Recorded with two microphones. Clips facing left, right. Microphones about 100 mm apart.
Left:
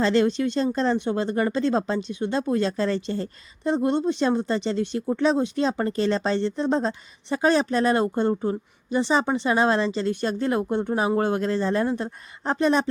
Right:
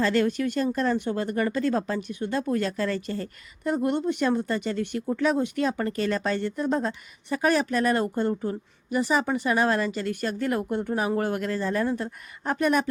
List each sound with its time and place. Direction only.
0.0 s speech: 25° left (ahead or behind)